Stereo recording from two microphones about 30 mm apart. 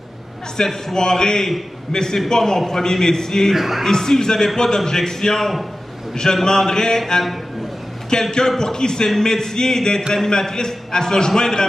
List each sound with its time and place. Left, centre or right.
0.6 s a man's voice: left; by 3.5 s centre
3.5 s speech: centre
3.8 s a man's voice: centre